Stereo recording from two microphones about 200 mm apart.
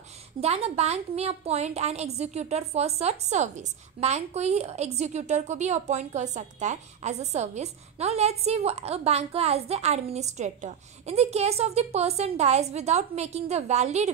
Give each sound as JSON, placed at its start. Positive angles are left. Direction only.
{"t": 0.4, "sound": "a woman's voice", "side_deg": -30}